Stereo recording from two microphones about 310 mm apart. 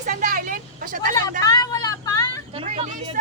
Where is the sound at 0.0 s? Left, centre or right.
Right.